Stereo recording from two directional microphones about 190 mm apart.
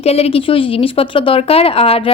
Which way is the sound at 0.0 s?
30° left (ahead or behind).